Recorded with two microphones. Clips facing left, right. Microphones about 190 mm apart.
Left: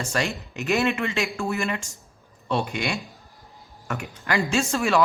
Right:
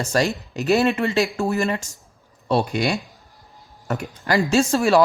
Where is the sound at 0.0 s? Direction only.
40° right (ahead or behind).